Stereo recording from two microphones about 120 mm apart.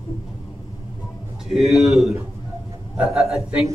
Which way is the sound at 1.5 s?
Centre (ahead or behind).